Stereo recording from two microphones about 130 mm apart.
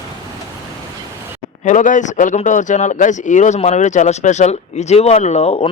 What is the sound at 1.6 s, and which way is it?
Speech, 75° left (ahead or behind).